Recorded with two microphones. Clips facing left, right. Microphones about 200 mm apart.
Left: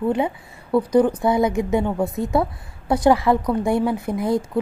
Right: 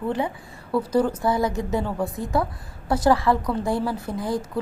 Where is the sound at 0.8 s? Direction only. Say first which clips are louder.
Left 5 dB; 5° right (ahead or behind).